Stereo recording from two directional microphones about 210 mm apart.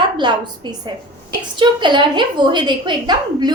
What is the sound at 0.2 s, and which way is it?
Speech, 20° right (ahead or behind).